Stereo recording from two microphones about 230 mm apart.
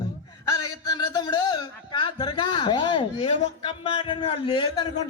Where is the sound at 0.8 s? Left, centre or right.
Centre.